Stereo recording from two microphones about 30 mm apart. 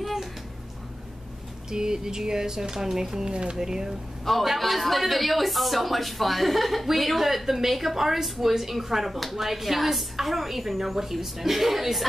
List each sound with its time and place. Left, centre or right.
0.0 s music: centre
1.7 s speech: right
3.3 s speech: right
3.5 s a woman's voice: centre
4.2 s a woman's voice: centre